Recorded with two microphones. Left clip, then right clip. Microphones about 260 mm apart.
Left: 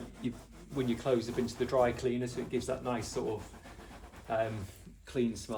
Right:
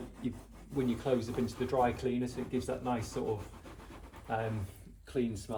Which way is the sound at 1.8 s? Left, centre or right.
Centre.